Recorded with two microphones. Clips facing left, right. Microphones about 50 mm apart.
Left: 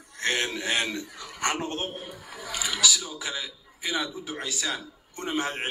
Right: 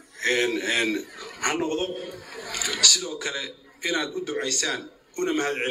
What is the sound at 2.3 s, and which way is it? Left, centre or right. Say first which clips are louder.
Speech: right 1 dB; right.